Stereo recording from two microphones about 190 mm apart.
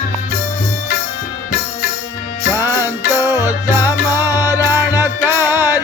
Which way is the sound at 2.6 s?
10° right (ahead or behind).